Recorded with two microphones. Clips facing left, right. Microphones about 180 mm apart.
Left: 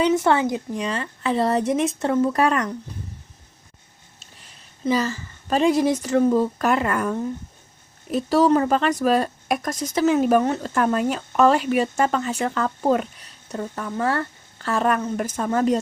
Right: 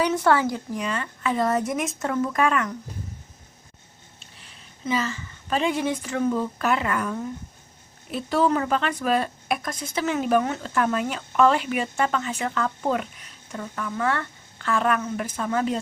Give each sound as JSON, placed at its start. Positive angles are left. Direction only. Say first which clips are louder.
{"t": 0.2, "sound": "speech", "louder": "left 1 dB", "side_deg": 20}
{"t": 4.2, "sound": "a woman's voice", "louder": "left 1 dB", "side_deg": 40}